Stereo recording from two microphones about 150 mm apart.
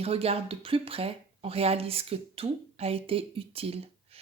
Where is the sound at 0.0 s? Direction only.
40° right (ahead or behind).